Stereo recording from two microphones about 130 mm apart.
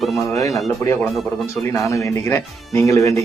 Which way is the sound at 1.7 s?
25° left (ahead or behind).